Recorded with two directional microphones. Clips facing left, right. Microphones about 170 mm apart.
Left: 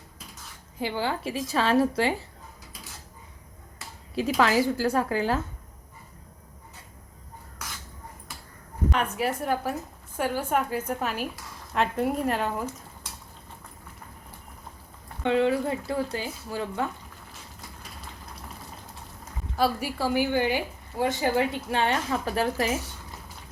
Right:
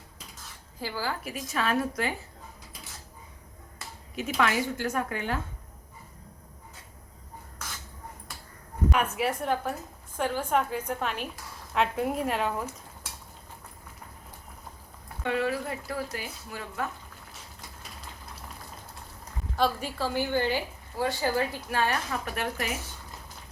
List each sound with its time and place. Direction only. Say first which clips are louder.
0.8 s a woman's voice: left 5 dB; 20° left (ahead or behind)
4.1 s a woman's voice: left 5 dB; 30° left (ahead or behind)
8.9 s a woman's voice: left 1 dB; 5° right (ahead or behind)
15.2 s a woman's voice: left 6 dB; 25° left (ahead or behind)
19.5 s a woman's voice: left 2 dB; 10° left (ahead or behind); by 22.7 s 30° left (ahead or behind)